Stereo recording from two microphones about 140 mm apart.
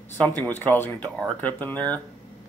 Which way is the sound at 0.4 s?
15° left (ahead or behind).